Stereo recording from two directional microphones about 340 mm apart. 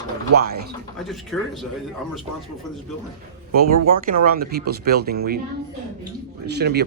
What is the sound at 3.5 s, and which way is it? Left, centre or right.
Speech, right.